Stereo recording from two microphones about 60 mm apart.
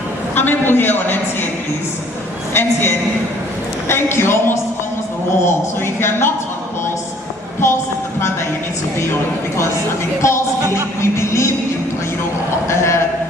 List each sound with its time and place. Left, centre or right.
0.3 s a woman's voice: left
2.5 s a woman's voice: left
10.2 s music: left
12.6 s a sound: left